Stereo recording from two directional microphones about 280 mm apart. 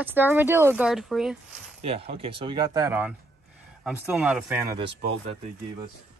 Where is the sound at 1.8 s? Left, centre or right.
Right.